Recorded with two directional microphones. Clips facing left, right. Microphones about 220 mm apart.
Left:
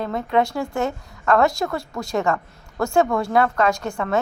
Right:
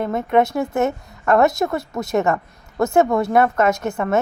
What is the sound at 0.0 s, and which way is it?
A woman's voice, 20° right (ahead or behind).